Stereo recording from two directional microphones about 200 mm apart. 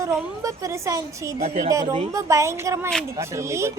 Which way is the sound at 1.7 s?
15° right (ahead or behind).